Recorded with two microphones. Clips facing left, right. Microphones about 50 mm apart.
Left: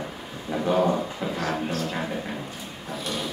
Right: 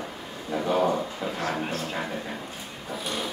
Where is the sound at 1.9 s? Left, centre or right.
Centre.